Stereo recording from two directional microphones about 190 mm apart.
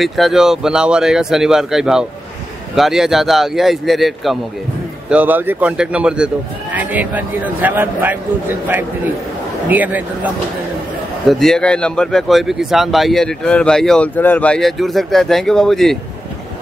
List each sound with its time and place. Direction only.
0.0 s a man's voice: centre (ahead or behind)
11.2 s speech: centre (ahead or behind)